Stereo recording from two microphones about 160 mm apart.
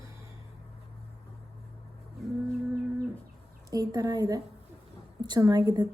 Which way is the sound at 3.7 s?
25° right (ahead or behind).